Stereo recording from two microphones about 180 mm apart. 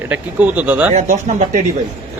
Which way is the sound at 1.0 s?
40° right (ahead or behind).